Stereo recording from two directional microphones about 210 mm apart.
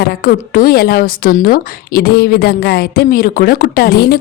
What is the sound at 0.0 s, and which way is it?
A woman's voice, 45° left (ahead or behind).